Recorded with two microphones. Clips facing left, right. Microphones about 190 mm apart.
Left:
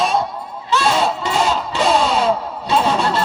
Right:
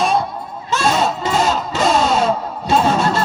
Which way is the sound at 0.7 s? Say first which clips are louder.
Even; 45° right (ahead or behind).